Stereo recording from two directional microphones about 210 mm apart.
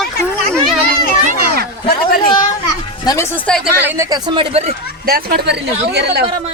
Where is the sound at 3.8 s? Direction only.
10° right (ahead or behind); by 4.7 s 30° right (ahead or behind).